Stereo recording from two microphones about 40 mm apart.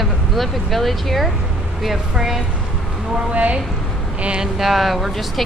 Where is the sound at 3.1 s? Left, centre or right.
Right.